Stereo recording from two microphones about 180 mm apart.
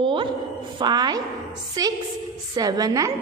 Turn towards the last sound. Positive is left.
turn(degrees=-20)  # may be behind; listen again after turning